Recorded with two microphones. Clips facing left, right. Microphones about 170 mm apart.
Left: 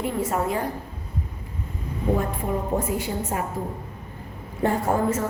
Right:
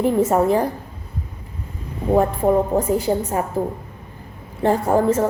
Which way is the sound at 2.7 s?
35° right (ahead or behind).